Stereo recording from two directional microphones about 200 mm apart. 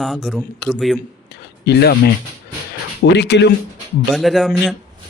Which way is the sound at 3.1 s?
60° left (ahead or behind).